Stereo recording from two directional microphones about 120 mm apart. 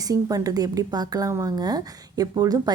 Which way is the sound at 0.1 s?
30° right (ahead or behind).